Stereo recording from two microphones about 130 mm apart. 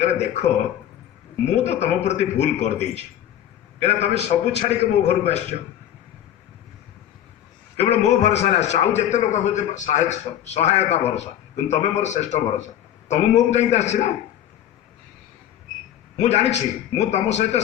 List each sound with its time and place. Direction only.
0.0 s a man's voice: 60° left (ahead or behind)
1.6 s a man's voice: 60° left (ahead or behind)
3.8 s a man's voice: 60° left (ahead or behind)
7.8 s a man's voice: 60° left (ahead or behind)
16.1 s a man's voice: 60° left (ahead or behind)